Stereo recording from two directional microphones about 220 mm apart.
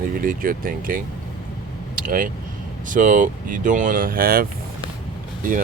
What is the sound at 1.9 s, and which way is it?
Vehicle, 40° right (ahead or behind).